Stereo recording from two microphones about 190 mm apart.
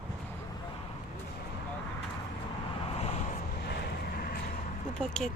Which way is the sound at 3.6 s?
60° left (ahead or behind).